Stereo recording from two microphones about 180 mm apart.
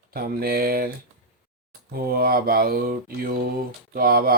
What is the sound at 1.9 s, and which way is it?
Mantra, 55° right (ahead or behind).